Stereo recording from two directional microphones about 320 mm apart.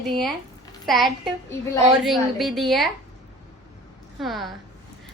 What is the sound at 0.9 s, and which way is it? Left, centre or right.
A woman's voice, centre.